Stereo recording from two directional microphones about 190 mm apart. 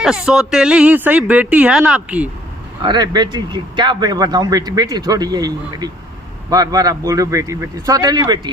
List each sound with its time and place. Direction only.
0.0 s speech: 5° right (ahead or behind)
2.8 s speech: 20° right (ahead or behind)